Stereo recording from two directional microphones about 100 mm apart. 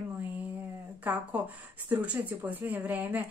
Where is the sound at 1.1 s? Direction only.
15° right (ahead or behind).